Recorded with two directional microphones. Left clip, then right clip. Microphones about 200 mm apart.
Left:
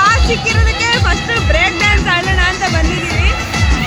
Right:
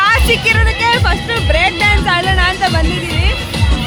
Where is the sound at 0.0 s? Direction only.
10° right (ahead or behind).